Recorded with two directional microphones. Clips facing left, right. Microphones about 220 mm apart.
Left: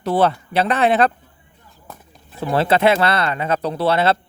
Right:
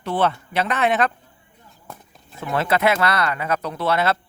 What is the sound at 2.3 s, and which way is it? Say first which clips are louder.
Speech: left 4 dB; 35° left (ahead or behind).